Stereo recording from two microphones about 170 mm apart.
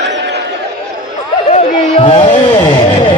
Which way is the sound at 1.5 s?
35° left (ahead or behind).